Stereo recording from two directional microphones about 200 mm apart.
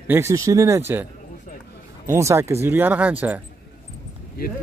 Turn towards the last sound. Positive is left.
turn(degrees=50)  # may be behind; listen again after turning